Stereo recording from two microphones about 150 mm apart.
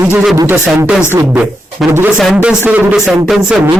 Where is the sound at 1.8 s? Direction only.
Centre (ahead or behind).